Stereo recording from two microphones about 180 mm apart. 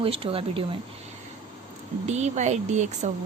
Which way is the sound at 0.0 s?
30° right (ahead or behind).